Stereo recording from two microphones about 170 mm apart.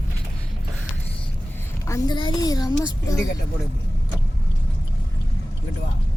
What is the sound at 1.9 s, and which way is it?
A child's voice, 25° left (ahead or behind).